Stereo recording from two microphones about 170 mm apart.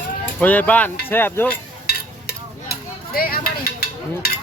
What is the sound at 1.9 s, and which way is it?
Stir, 65° left (ahead or behind).